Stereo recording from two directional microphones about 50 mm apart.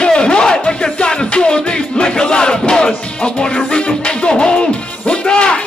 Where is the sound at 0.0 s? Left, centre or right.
Centre.